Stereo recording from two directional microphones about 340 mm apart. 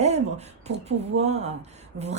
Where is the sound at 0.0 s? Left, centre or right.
Centre.